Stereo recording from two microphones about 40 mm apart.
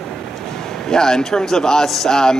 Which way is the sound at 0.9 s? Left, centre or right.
Centre.